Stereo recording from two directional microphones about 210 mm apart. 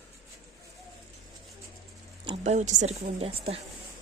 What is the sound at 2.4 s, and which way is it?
Speech, 35° right (ahead or behind).